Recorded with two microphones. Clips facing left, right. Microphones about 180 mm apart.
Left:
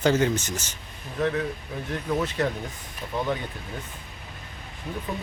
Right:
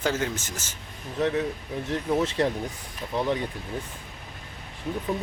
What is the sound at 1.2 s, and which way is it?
Speech, 20° right (ahead or behind).